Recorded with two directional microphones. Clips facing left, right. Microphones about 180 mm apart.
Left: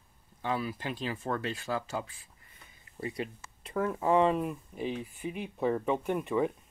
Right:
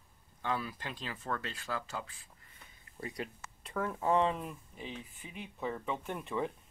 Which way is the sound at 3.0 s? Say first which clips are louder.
Left 5 dB; 5° left (ahead or behind).